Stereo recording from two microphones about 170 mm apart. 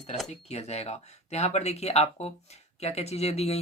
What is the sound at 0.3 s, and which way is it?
Speech, 40° left (ahead or behind).